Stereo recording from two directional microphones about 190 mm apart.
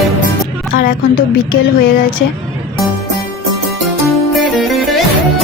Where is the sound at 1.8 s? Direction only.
45° left (ahead or behind).